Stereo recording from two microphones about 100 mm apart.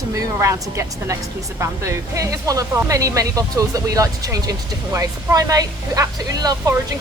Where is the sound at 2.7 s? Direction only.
20° right (ahead or behind).